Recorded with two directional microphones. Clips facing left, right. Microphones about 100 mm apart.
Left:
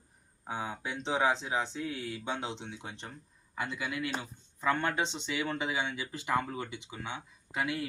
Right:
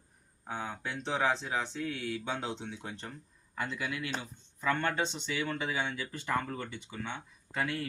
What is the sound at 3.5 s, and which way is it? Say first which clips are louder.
Speech: left 1 dB; 10° left (ahead or behind).